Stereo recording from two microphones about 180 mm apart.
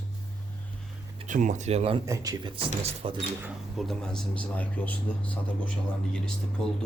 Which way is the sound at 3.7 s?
Centre (ahead or behind).